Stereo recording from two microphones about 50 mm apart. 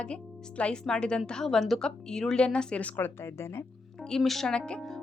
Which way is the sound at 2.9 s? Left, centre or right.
Left.